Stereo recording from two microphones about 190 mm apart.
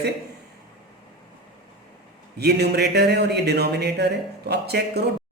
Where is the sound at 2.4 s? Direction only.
60° right (ahead or behind).